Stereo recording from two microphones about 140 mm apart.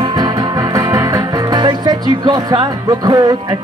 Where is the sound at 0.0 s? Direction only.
30° right (ahead or behind).